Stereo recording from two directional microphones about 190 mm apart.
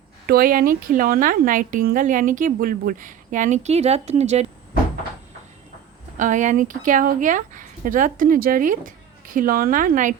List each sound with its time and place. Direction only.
0.3 s a woman's voice: 50° right (ahead or behind)
6.1 s speech: 40° right (ahead or behind)